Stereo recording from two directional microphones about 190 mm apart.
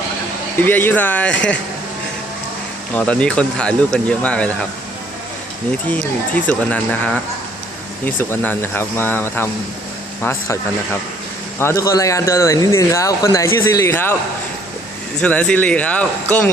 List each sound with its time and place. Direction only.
0.6 s speech: 10° left (ahead or behind)
2.9 s speech: 5° left (ahead or behind)
5.9 s speech: 10° left (ahead or behind)
11.6 s speech: 15° left (ahead or behind)
15.2 s speech: 5° left (ahead or behind)